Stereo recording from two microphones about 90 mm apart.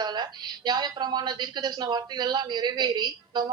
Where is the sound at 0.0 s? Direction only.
55° right (ahead or behind).